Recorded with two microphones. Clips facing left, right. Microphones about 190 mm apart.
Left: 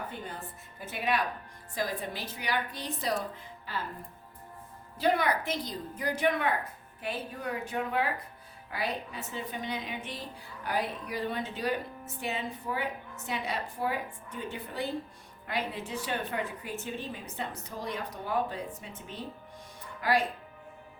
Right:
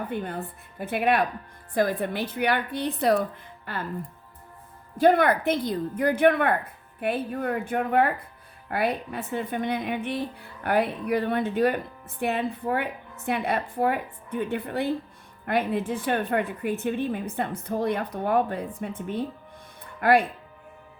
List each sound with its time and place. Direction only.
0.1 s speech: 60° right (ahead or behind)
4.9 s speech: 55° right (ahead or behind)